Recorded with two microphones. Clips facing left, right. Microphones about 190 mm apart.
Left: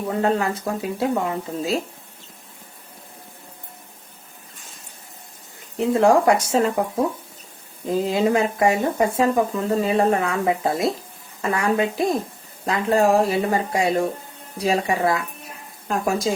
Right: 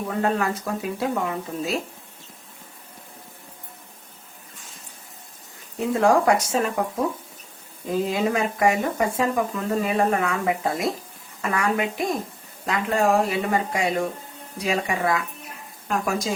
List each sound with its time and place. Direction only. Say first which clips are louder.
0.1 s speech: left 3 dB; 25° left (ahead or behind)
5.7 s speech: left 3 dB; 20° left (ahead or behind)
7.9 s speech: left 3 dB; 30° left (ahead or behind)